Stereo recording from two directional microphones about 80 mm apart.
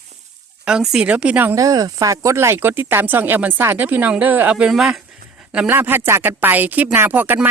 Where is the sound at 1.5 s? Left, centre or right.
Right.